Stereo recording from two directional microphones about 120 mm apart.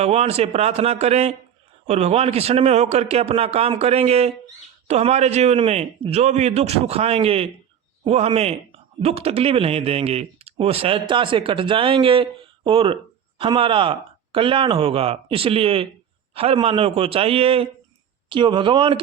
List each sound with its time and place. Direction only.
0.0 s a man's voice: 60° right (ahead or behind)
18.3 s speech: 40° right (ahead or behind)